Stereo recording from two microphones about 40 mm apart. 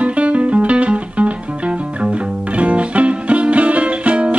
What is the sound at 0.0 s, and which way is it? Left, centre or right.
Music, right.